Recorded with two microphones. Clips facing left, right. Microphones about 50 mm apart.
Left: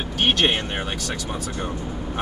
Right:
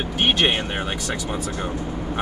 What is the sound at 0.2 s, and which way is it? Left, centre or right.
Speech, centre.